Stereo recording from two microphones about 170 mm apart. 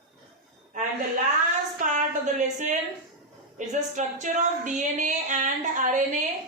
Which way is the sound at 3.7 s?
45° right (ahead or behind).